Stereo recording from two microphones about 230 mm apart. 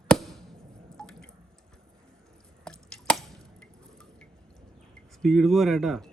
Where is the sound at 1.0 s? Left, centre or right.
Centre.